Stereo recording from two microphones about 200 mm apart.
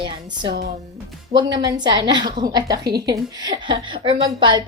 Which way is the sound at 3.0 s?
20° right (ahead or behind).